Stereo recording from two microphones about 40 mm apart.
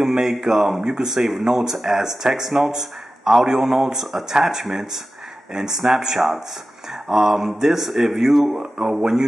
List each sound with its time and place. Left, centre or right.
0.0 s speech: centre
8.7 s speech: centre